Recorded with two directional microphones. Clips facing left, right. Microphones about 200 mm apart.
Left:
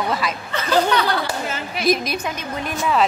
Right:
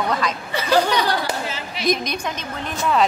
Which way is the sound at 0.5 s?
10° right (ahead or behind).